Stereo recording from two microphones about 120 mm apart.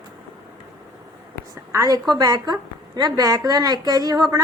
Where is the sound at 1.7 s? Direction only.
30° right (ahead or behind).